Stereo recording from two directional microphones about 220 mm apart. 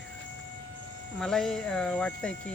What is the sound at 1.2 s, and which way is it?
Speech, centre (ahead or behind).